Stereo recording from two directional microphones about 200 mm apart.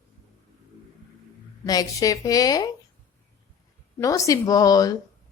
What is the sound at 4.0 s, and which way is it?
Speech, 15° left (ahead or behind).